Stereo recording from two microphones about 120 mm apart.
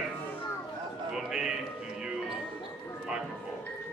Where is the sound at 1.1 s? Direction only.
5° right (ahead or behind).